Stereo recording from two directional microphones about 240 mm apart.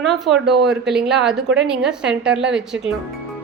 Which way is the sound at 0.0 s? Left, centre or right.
Centre.